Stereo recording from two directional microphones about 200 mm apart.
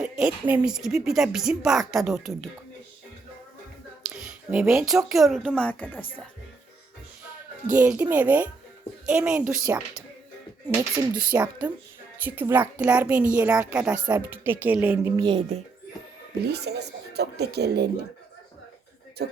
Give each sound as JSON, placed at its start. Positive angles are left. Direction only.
{"t": 0.0, "sound": "speech", "side_deg": -5}
{"t": 4.1, "sound": "a sound", "side_deg": -10}
{"t": 5.0, "sound": "speech", "side_deg": 0}
{"t": 7.7, "sound": "speech", "side_deg": -10}
{"t": 10.8, "sound": "speech", "side_deg": -20}
{"t": 11.3, "sound": "speech", "side_deg": -10}
{"t": 15.1, "sound": "speech", "side_deg": -25}
{"t": 16.4, "sound": "speech", "side_deg": -55}